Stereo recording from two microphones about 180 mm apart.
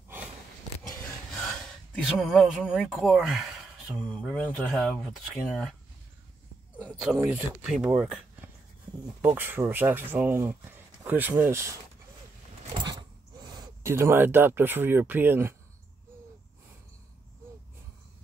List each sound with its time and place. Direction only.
2.0 s speech: centre (ahead or behind)
6.8 s speech: 5° right (ahead or behind)
13.4 s speech: 20° right (ahead or behind)